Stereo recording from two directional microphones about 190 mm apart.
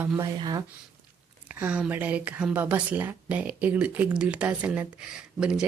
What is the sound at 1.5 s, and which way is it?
Speech, 5° right (ahead or behind).